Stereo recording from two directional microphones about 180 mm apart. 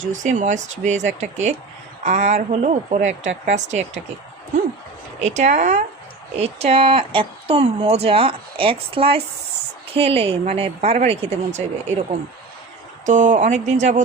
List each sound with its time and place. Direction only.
0.0 s speech: 45° right (ahead or behind)
5.2 s speech: 40° right (ahead or behind)
13.1 s speech: 45° right (ahead or behind)